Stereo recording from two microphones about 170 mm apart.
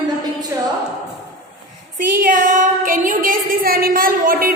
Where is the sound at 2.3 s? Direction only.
50° right (ahead or behind).